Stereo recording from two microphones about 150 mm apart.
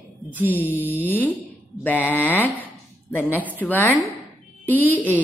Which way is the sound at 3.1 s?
10° left (ahead or behind).